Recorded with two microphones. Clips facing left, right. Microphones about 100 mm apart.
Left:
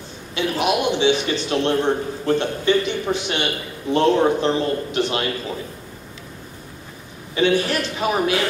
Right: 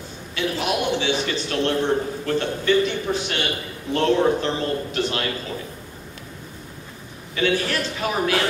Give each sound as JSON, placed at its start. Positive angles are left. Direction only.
{"t": 0.3, "sound": "a man's voice", "side_deg": 20}
{"t": 7.3, "sound": "a man's voice", "side_deg": 20}